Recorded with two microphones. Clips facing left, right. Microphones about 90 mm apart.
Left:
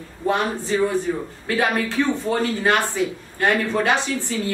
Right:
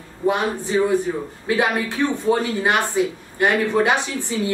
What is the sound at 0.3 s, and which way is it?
A woman's voice, 15° right (ahead or behind).